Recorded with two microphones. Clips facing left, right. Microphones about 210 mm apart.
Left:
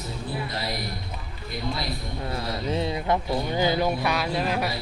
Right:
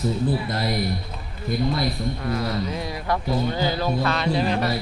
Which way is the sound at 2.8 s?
20° left (ahead or behind).